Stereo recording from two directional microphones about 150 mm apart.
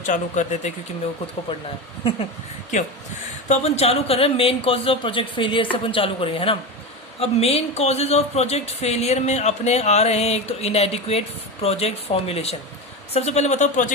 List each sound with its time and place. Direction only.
0.0 s speech: 55° left (ahead or behind)
1.5 s a man's voice: 30° left (ahead or behind)
3.5 s a man's voice: 45° left (ahead or behind)